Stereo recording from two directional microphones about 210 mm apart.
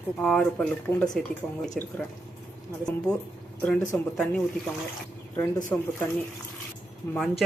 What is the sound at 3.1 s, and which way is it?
Speech, 20° left (ahead or behind).